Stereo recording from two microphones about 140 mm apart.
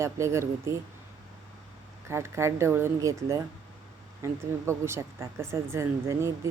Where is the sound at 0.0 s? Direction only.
20° right (ahead or behind).